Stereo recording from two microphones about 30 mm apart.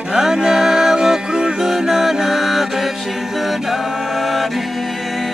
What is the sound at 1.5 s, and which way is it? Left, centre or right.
Mantra, centre.